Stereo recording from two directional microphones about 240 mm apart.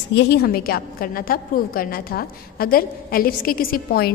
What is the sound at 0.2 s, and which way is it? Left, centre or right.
A woman's voice, left.